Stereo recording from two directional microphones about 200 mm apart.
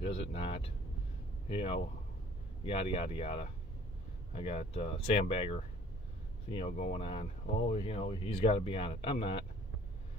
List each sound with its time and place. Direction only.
0.0 s speech: 30° left (ahead or behind)